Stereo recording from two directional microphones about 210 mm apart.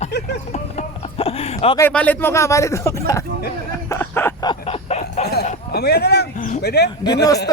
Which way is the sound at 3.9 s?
10° left (ahead or behind).